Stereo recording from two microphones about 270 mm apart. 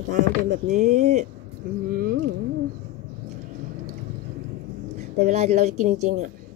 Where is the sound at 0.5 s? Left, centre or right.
Right.